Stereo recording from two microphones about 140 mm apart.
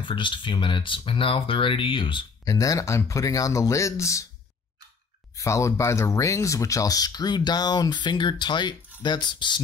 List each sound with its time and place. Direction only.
0.0 s speech: 35° left (ahead or behind)
5.3 s speech: 20° left (ahead or behind)